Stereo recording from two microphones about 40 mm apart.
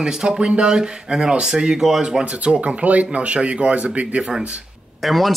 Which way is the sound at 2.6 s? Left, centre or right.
Right.